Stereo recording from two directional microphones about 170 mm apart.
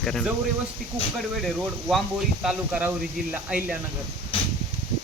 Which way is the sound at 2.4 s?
5° right (ahead or behind).